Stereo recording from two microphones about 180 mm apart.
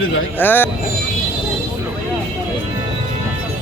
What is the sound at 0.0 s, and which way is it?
Speech, 90° left.